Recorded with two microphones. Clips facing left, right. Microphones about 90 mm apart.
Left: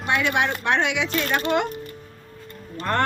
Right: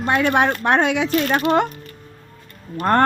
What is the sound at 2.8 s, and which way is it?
Speech, 45° right (ahead or behind).